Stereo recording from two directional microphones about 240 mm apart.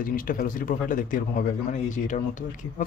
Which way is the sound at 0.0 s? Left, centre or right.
Left.